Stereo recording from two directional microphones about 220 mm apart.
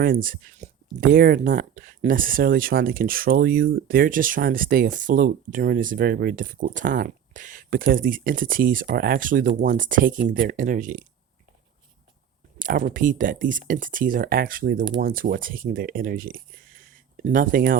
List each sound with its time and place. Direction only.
0.0 s speech: 40° right (ahead or behind)
12.6 s speech: 35° right (ahead or behind)